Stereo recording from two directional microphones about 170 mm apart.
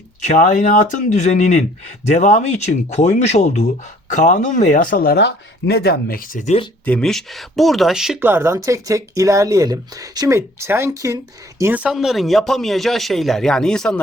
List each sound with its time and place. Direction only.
0.2 s speech: 45° left (ahead or behind)
6.8 s speech: 5° left (ahead or behind); by 11.2 s 20° right (ahead or behind)
11.6 s speech: 10° right (ahead or behind)